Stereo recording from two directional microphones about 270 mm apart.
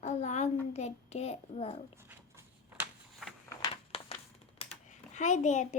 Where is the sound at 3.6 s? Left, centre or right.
Centre.